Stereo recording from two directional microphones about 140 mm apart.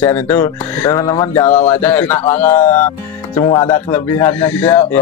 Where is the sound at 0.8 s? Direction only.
25° left (ahead or behind).